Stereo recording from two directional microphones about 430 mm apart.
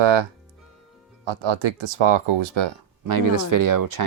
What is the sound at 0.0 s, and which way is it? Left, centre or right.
Speech, right.